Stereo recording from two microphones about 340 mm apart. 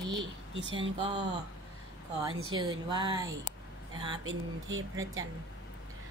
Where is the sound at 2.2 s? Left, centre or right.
Centre.